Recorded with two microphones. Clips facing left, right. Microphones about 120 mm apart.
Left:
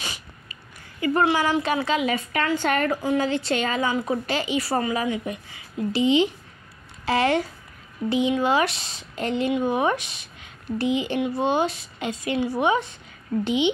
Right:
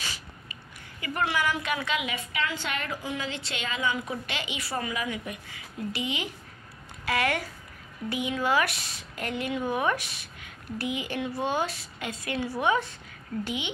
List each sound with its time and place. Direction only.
1.0 s a woman's voice: 30° left (ahead or behind)